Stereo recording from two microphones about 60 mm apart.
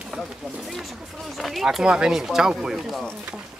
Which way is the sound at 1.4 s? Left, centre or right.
Centre.